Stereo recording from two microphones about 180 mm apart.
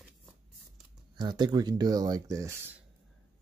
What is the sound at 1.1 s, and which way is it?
Speech, 25° right (ahead or behind).